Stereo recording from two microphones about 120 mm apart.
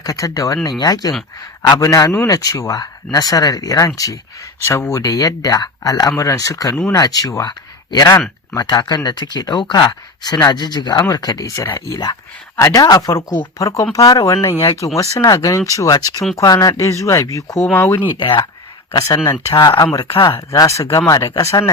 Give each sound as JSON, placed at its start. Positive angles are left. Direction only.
{"t": 0.0, "sound": "speech", "side_deg": 30}
{"t": 18.2, "sound": "speech", "side_deg": 40}
{"t": 20.5, "sound": "speech", "side_deg": 25}